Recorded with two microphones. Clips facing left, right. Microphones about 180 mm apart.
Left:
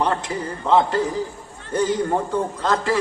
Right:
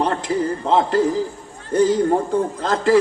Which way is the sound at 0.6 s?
30° right (ahead or behind).